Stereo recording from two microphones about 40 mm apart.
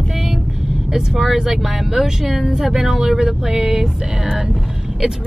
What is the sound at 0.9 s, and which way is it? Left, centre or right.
Speech, centre.